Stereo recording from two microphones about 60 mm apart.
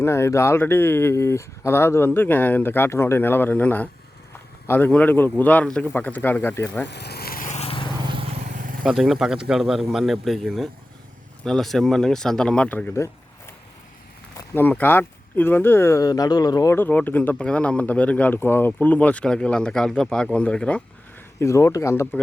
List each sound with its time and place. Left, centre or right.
0.0 s speech: left
8.8 s speech: centre
12.6 s speech: left
14.5 s speech: left
16.0 s speech: left
16.7 s speech: left
17.3 s speech: centre
18.3 s speech: left
19.2 s speech: centre
21.3 s speech: left